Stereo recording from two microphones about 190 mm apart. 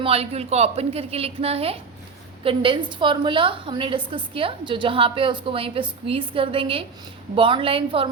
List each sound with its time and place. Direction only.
0.0 s a woman's voice: 30° right (ahead or behind)